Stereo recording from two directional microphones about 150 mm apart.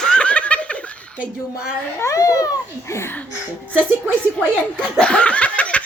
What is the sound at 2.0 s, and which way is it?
A child's voice, 20° left (ahead or behind).